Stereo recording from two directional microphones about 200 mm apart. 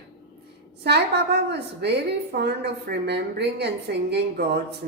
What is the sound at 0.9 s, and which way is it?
A woman's voice, 55° right (ahead or behind).